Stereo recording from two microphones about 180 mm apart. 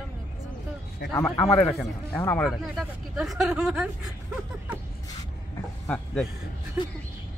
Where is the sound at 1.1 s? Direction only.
15° left (ahead or behind).